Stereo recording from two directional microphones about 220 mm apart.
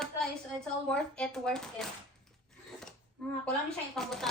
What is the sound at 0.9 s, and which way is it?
Speech, 5° left (ahead or behind).